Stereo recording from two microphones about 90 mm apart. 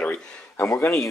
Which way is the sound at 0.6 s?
20° left (ahead or behind).